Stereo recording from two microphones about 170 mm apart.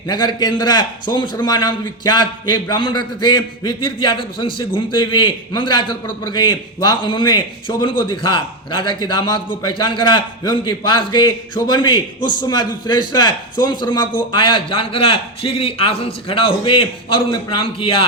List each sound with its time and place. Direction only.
0.1 s a man's voice: 25° left (ahead or behind)